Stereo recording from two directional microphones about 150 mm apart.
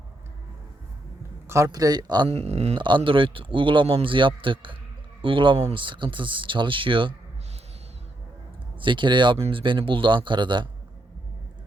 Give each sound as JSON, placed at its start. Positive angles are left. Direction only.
{"t": 1.5, "sound": "speech", "side_deg": -20}
{"t": 2.3, "sound": "speech", "side_deg": -45}
{"t": 2.7, "sound": "a man's voice", "side_deg": -30}
{"t": 8.8, "sound": "a man's voice", "side_deg": -35}